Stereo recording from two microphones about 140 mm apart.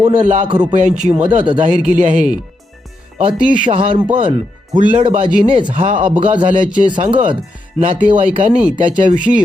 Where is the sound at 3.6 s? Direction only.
40° right (ahead or behind).